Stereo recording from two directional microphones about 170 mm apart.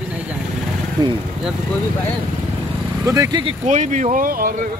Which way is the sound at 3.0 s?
20° right (ahead or behind).